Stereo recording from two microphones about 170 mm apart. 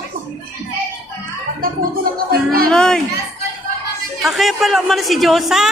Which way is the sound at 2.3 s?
60° right (ahead or behind).